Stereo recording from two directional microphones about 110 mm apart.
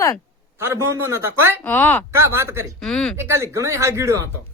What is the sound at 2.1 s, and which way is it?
Speech, 20° right (ahead or behind).